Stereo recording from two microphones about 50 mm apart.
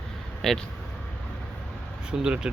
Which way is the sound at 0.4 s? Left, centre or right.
Centre.